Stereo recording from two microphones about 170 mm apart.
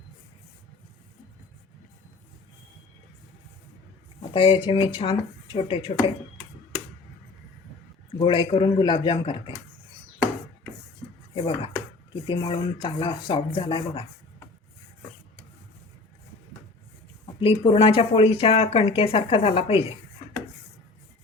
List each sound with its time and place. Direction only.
4.4 s speech: 30° left (ahead or behind)
8.2 s speech: 30° left (ahead or behind)
11.3 s speech: 35° left (ahead or behind)
17.4 s speech: 30° left (ahead or behind)